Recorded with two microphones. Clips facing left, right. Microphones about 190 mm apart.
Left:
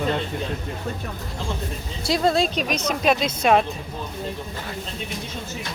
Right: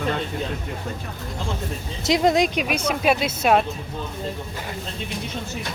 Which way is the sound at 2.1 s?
20° right (ahead or behind).